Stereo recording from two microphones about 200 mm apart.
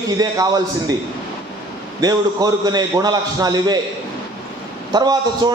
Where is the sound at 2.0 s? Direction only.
20° right (ahead or behind).